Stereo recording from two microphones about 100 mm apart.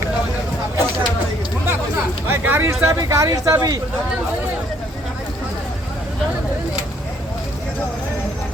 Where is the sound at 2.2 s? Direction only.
20° right (ahead or behind).